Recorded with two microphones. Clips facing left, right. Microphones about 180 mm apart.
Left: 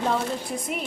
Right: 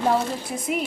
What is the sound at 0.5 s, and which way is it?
Speech, centre (ahead or behind).